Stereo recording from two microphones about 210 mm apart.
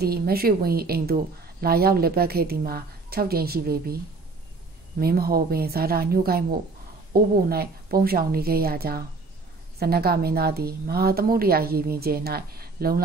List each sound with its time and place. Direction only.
0.0 s a woman's voice: 50° right (ahead or behind)
5.0 s a woman's voice: 45° right (ahead or behind)